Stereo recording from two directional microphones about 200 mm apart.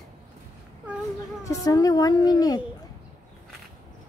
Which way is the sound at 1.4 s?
20° left (ahead or behind).